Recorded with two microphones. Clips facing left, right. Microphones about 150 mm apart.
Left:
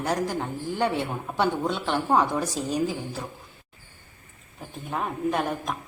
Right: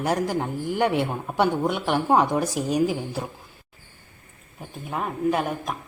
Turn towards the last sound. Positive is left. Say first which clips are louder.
# right 2 dB
turn(degrees=-5)  # may be behind; listen again after turning